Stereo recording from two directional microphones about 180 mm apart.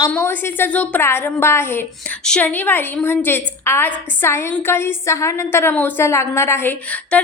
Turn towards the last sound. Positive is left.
turn(degrees=5)  # may be behind; listen again after turning